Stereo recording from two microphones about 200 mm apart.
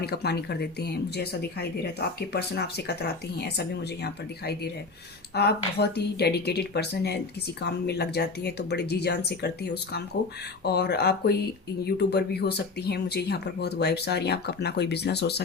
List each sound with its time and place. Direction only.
0.0 s speech: 55° left (ahead or behind)